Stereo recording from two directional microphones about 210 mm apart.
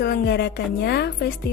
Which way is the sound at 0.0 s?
50° left (ahead or behind).